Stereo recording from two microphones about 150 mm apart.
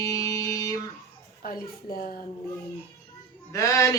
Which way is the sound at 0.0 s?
20° left (ahead or behind).